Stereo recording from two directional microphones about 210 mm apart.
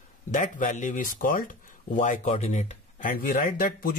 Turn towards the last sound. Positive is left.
turn(degrees=45)  # may be behind; listen again after turning